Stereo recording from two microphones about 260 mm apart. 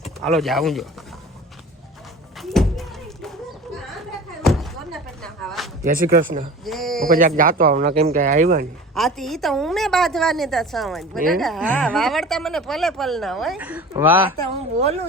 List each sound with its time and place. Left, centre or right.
0.3 s speech: centre
2.4 s a sound: centre
4.4 s a sound: centre
5.8 s speech: right
6.7 s speech: centre
7.1 s speech: right
9.0 s a woman's voice: centre